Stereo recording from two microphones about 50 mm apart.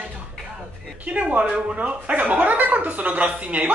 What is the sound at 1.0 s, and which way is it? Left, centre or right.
Speech, right.